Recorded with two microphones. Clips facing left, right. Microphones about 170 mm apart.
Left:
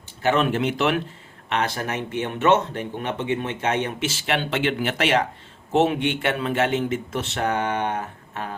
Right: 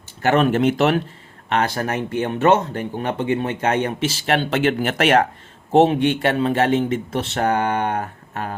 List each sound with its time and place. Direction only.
0.2 s speech: 50° right (ahead or behind)
5.7 s speech: 35° right (ahead or behind)